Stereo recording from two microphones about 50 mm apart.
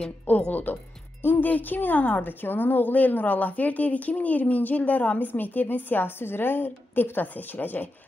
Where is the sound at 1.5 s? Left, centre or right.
Left.